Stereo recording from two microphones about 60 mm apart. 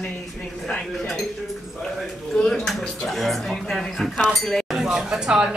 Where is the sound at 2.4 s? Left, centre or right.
Centre.